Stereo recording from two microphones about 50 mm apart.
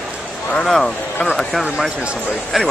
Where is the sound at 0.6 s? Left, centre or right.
Centre.